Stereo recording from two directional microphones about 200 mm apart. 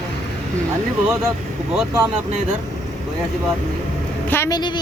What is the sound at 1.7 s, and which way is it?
Speech, 10° right (ahead or behind).